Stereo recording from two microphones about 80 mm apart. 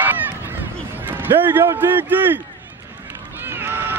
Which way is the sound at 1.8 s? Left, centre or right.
Right.